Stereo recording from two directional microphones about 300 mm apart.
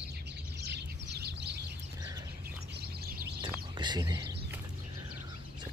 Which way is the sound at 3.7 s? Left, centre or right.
Centre.